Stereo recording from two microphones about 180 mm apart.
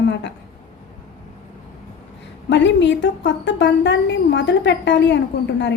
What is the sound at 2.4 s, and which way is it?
A woman's voice, 80° left.